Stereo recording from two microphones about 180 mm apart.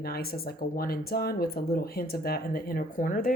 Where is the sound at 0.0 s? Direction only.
55° left (ahead or behind).